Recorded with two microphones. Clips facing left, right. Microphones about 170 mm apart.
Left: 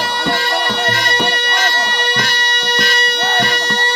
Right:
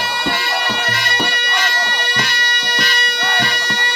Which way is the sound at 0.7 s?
35° left (ahead or behind).